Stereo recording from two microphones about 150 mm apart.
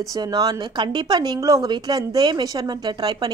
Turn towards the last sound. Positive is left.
turn(degrees=-30)  # may be behind; listen again after turning